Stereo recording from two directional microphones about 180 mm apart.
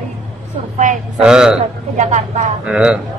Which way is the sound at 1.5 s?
40° right (ahead or behind).